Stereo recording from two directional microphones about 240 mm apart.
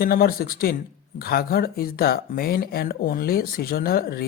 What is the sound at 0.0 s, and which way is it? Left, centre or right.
Speech, left.